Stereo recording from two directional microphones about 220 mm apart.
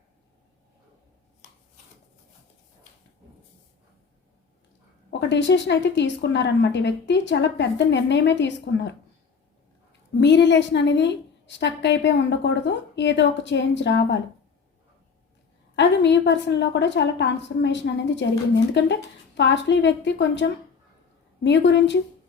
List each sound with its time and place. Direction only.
5.3 s a woman's voice: 55° left (ahead or behind)
10.2 s a woman's voice: 55° left (ahead or behind)
15.7 s a woman's voice: 55° left (ahead or behind)